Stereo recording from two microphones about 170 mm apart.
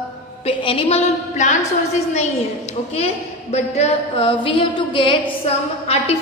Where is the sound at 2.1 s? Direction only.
40° left (ahead or behind).